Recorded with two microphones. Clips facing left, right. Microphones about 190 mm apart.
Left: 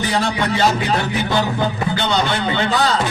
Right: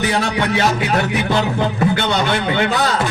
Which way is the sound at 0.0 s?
60° right (ahead or behind).